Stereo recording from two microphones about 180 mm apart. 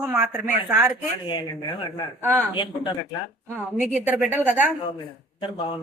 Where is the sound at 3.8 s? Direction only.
5° right (ahead or behind).